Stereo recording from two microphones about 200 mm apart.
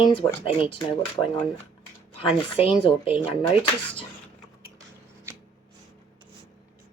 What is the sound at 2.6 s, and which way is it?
Speech, 25° left (ahead or behind).